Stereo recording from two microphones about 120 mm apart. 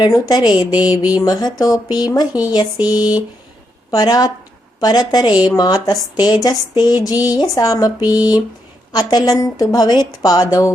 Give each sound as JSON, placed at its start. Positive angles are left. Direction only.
{"t": 0.0, "sound": "speech", "side_deg": 35}